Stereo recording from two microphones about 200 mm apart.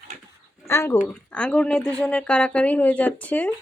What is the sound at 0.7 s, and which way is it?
Speech, 15° left (ahead or behind).